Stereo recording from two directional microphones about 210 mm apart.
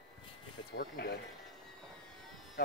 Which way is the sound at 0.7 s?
50° left (ahead or behind).